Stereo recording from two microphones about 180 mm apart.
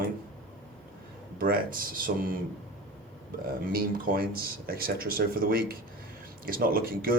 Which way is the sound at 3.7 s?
55° right (ahead or behind).